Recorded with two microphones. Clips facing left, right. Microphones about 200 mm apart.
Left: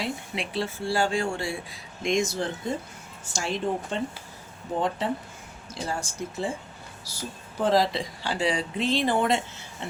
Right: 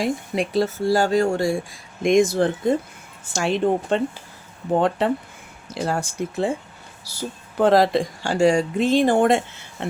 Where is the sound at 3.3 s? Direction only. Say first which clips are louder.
Right 8 dB; 65° right (ahead or behind).